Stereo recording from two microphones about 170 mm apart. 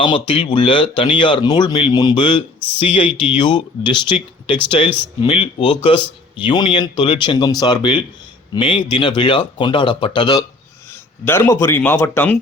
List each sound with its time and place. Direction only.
0.0 s speech: 30° left (ahead or behind)
11.3 s speech: 15° left (ahead or behind)